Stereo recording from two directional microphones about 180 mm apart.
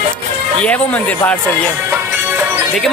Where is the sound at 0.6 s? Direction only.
10° left (ahead or behind).